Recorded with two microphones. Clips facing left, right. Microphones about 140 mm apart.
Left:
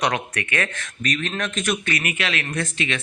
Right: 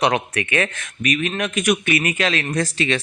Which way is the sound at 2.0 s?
35° right (ahead or behind).